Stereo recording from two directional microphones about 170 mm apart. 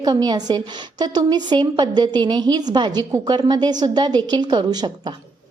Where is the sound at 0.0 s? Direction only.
20° right (ahead or behind).